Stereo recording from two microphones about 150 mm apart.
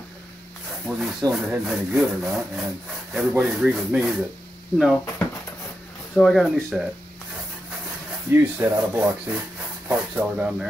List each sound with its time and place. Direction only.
0.8 s speech: 5° right (ahead or behind)
6.1 s speech: centre (ahead or behind)
8.3 s speech: 15° right (ahead or behind)